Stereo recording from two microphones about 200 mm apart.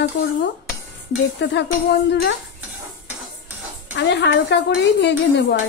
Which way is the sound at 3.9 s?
60° left (ahead or behind).